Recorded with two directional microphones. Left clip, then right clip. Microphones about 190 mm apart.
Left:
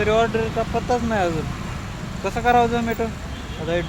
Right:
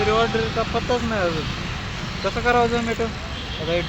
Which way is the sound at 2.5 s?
30° left (ahead or behind).